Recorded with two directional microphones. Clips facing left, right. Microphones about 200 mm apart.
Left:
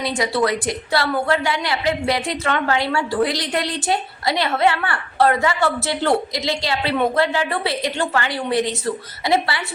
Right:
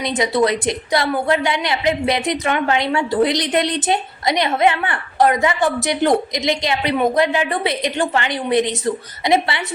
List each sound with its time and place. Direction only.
0.0 s a woman's voice: 20° right (ahead or behind)